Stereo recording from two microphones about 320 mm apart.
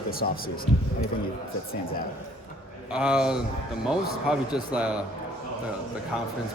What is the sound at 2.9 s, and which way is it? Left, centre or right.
Speech, centre.